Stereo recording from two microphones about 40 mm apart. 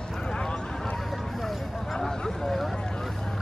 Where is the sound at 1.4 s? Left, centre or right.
Centre.